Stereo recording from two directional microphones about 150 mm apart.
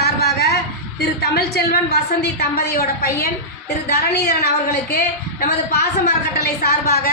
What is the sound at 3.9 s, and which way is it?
Speech, 90° left.